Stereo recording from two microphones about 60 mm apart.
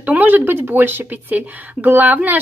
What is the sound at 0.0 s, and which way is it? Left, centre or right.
Speech, right.